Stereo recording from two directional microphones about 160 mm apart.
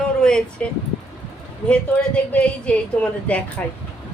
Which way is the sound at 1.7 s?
10° left (ahead or behind).